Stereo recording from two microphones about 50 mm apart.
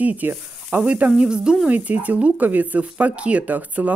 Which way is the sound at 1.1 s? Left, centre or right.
Centre.